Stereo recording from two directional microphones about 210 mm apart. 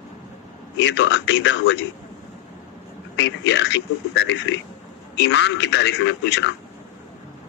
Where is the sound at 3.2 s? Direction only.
60° left (ahead or behind).